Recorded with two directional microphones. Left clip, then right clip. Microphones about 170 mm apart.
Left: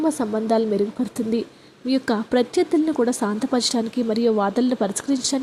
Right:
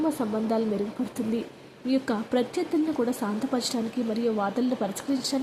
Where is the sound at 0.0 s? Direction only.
25° left (ahead or behind).